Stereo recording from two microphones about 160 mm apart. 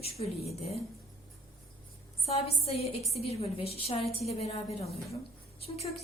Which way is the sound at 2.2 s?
40° left (ahead or behind).